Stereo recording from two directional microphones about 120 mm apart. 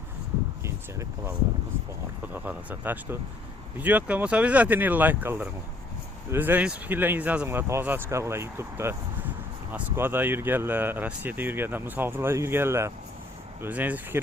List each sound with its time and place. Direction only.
0.6 s speech: 25° right (ahead or behind)